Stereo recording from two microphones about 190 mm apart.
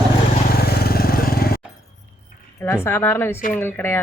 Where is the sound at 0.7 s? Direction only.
55° left (ahead or behind).